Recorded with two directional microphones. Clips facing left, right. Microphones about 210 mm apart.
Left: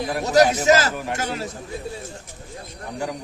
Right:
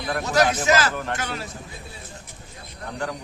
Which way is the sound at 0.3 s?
40° left (ahead or behind).